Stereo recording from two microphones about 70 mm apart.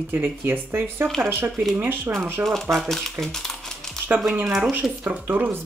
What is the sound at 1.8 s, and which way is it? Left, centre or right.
Speech, right.